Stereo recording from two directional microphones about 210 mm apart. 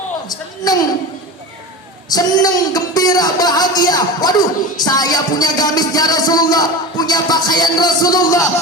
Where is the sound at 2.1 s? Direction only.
20° left (ahead or behind).